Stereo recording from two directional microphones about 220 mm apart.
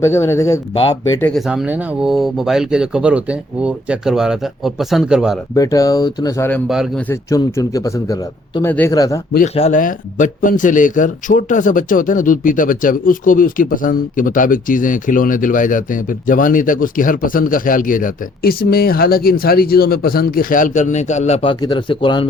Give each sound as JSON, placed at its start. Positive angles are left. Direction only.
{"t": 0.0, "sound": "a man's voice", "side_deg": 10}
{"t": 1.2, "sound": "speech", "side_deg": 0}
{"t": 5.5, "sound": "a man's voice", "side_deg": 15}
{"t": 6.7, "sound": "speech", "side_deg": 0}
{"t": 7.1, "sound": "a man's voice", "side_deg": 15}
{"t": 9.6, "sound": "a man's voice", "side_deg": 35}